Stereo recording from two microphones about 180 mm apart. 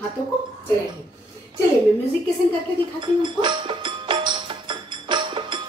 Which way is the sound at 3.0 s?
25° right (ahead or behind).